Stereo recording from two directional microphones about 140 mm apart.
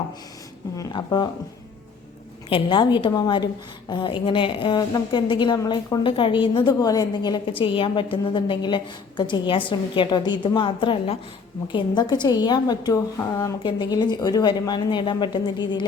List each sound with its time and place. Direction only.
0.8 s a woman's voice: 30° left (ahead or behind)
2.5 s a woman's voice: 35° left (ahead or behind)